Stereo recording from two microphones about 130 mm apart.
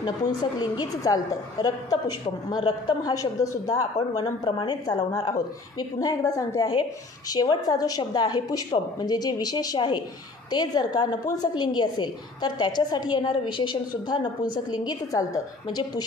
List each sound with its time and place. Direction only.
0.0 s a woman's voice: 30° left (ahead or behind)